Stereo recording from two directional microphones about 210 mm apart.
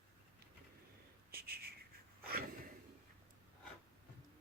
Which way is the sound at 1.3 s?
45° right (ahead or behind).